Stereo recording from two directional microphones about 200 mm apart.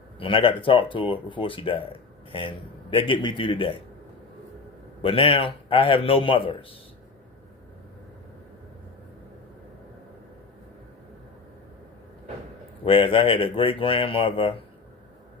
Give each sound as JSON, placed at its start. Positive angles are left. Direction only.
{"t": 0.2, "sound": "speech", "side_deg": 25}
{"t": 5.0, "sound": "speech", "side_deg": 25}
{"t": 12.8, "sound": "speech", "side_deg": 25}